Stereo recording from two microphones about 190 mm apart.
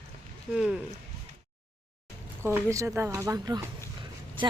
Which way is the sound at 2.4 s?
15° right (ahead or behind).